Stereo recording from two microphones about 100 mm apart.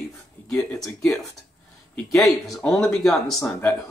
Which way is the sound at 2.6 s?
10° left (ahead or behind).